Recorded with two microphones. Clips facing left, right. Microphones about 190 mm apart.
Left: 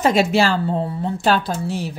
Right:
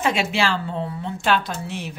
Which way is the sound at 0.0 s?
40° left (ahead or behind).